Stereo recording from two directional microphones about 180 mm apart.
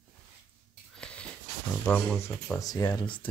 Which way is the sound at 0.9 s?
5° left (ahead or behind).